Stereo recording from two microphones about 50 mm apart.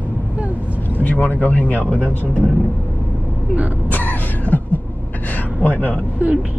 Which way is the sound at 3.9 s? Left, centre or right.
Left.